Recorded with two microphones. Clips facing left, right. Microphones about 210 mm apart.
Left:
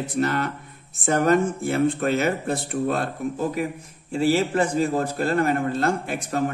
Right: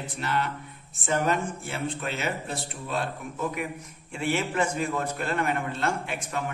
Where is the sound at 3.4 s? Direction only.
30° left (ahead or behind).